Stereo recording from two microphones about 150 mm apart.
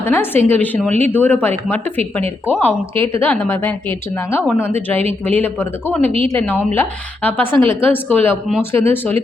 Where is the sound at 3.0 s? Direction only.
15° left (ahead or behind).